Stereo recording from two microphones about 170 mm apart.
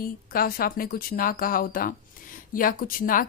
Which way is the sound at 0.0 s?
60° left (ahead or behind).